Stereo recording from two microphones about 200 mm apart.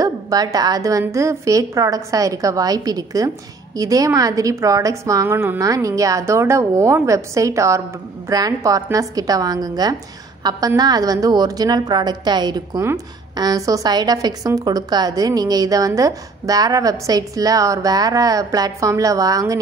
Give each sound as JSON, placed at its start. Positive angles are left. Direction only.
{"t": 0.0, "sound": "a woman's voice", "side_deg": -20}